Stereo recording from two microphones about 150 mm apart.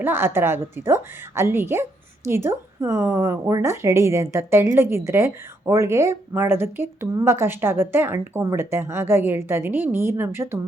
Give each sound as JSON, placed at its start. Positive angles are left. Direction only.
{"t": 0.0, "sound": "a woman's voice", "side_deg": -15}